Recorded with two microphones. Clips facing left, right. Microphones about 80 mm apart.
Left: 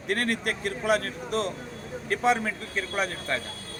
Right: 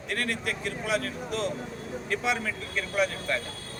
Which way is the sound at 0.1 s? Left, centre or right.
Left.